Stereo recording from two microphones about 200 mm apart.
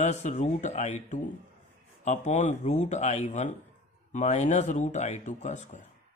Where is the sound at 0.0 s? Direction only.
35° left (ahead or behind).